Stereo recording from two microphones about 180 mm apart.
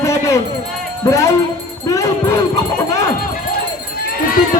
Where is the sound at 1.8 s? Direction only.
15° left (ahead or behind).